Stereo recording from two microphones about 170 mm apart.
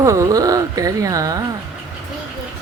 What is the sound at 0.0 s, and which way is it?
Speech, 20° right (ahead or behind).